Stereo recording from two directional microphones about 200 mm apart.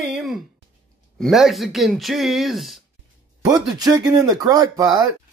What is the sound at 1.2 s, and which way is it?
Speech, centre (ahead or behind).